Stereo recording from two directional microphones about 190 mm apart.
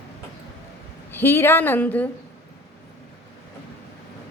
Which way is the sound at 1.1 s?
10° left (ahead or behind).